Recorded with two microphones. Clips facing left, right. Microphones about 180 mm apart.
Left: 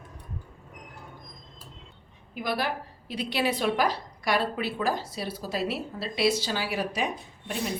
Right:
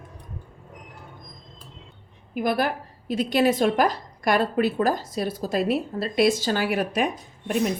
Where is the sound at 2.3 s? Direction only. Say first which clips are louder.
Right 6 dB; 50° right (ahead or behind).